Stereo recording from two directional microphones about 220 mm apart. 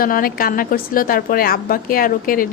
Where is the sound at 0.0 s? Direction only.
40° left (ahead or behind).